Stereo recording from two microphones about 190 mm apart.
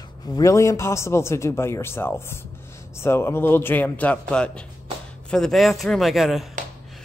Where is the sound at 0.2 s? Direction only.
20° left (ahead or behind).